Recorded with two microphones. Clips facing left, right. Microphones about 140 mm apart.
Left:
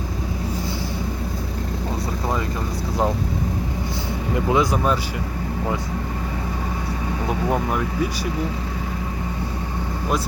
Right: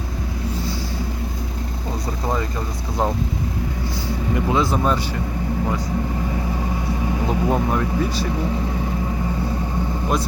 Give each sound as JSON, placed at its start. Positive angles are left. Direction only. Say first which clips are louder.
{"t": 4.4, "sound": "speech", "louder": "left 1 dB", "side_deg": 15}